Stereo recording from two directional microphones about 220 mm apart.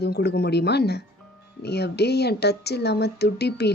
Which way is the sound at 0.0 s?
45° left (ahead or behind).